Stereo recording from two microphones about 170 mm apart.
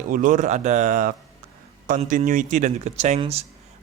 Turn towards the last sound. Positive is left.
turn(degrees=-40)  # may be behind; listen again after turning